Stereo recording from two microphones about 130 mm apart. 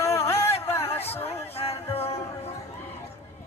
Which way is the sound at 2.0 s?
50° left (ahead or behind).